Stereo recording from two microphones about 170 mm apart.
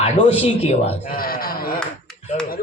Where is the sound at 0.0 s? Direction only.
35° left (ahead or behind).